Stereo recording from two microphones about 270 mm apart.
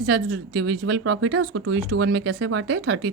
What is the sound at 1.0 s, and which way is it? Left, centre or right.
Speech, right.